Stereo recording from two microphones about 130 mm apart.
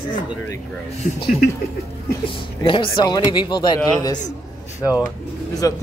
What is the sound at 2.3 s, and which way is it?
Speech, 40° left (ahead or behind).